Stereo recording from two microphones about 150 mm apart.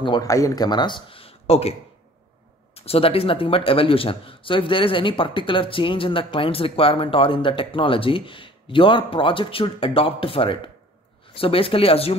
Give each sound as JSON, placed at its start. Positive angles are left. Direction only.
{"t": 0.0, "sound": "a man's voice", "side_deg": 25}